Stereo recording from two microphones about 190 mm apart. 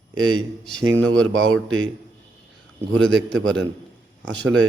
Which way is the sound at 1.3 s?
90° right.